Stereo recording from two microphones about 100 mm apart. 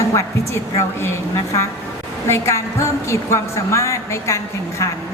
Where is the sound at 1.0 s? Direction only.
25° left (ahead or behind).